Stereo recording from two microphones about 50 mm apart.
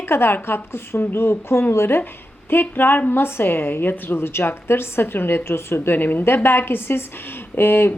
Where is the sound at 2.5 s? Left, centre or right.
Left.